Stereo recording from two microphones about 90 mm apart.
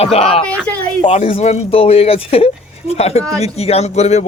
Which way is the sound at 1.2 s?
90° left.